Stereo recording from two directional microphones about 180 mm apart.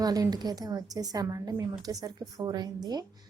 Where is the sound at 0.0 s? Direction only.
20° right (ahead or behind).